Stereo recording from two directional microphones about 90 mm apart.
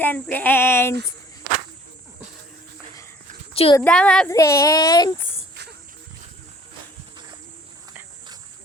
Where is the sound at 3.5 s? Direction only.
90° left.